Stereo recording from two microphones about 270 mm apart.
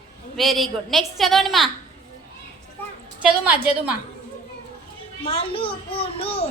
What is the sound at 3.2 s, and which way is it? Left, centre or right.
Speech, centre.